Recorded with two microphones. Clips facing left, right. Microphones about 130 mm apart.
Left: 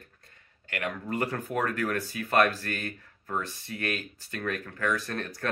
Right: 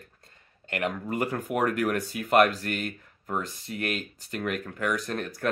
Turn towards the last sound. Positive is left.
turn(degrees=-15)  # may be behind; listen again after turning